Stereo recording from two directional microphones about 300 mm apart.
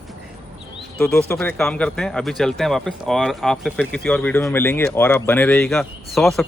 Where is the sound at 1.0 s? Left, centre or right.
Centre.